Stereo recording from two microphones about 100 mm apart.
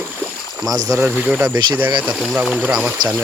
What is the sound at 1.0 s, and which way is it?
Speech, 15° right (ahead or behind).